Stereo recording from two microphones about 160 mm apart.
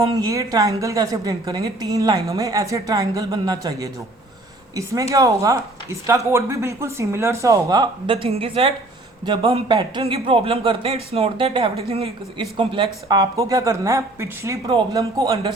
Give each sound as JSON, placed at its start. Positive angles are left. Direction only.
{"t": 0.0, "sound": "a woman's voice", "side_deg": -20}